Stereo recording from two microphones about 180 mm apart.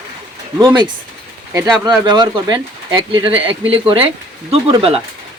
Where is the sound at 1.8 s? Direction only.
25° right (ahead or behind).